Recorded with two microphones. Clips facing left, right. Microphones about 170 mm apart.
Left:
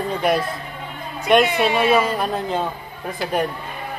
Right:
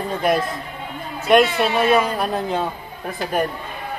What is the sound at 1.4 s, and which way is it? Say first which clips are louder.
A man's voice: even; 10° left (ahead or behind).